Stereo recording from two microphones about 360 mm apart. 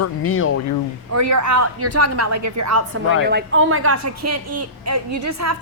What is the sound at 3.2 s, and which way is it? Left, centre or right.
A woman's voice, right.